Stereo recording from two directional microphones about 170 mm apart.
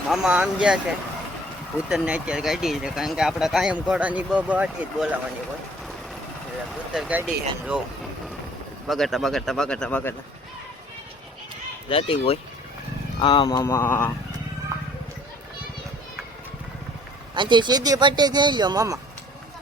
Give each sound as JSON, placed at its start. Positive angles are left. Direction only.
{"t": 0.1, "sound": "speech", "side_deg": -5}
{"t": 1.9, "sound": "speech", "side_deg": -5}
{"t": 6.9, "sound": "speech", "side_deg": -5}
{"t": 8.9, "sound": "speech", "side_deg": 0}
{"t": 11.9, "sound": "speech", "side_deg": 35}
{"t": 17.3, "sound": "speech", "side_deg": -25}